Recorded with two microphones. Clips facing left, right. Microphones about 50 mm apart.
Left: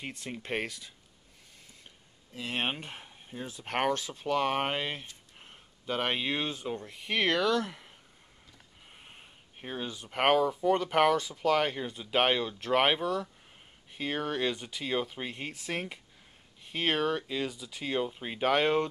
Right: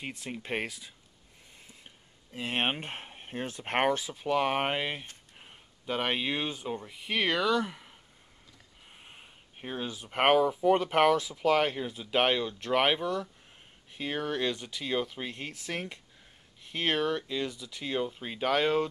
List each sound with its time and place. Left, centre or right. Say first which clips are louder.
0.0 s speech: right 1 dB; centre
2.3 s speech: right 3 dB; right
2.9 s speech: right 5 dB; right
3.6 s speech: right 2 dB; right
3.9 s speech: right 1 dB; centre
8.9 s speech: right 1 dB; centre